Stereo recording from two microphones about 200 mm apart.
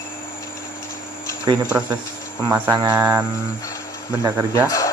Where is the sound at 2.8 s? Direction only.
20° right (ahead or behind).